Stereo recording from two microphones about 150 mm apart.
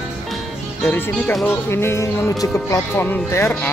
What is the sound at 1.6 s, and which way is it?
Speech, 15° left (ahead or behind).